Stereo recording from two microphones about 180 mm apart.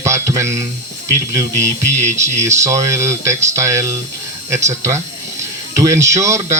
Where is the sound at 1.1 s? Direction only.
15° right (ahead or behind).